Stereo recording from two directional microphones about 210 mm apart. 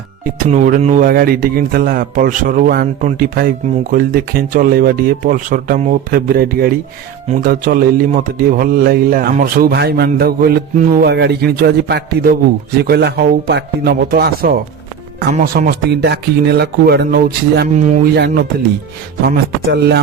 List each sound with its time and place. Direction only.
0.4 s a man's voice: 35° right (ahead or behind)
17.7 s speech: 35° right (ahead or behind)
18.1 s a man's voice: 50° right (ahead or behind)